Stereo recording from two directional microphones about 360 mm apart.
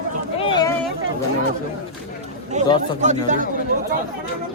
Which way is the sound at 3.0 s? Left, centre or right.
Centre.